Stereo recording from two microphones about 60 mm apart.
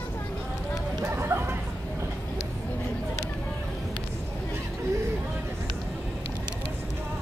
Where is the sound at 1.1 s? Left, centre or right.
Right.